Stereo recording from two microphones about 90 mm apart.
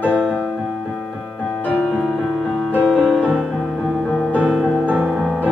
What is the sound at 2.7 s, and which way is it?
Music, 15° left (ahead or behind).